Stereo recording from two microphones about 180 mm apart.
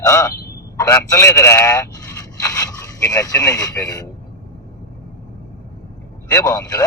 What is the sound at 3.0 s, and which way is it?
Speech, 20° left (ahead or behind).